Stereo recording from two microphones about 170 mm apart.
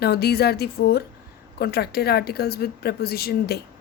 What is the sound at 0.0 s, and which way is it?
A woman's voice, 70° left (ahead or behind).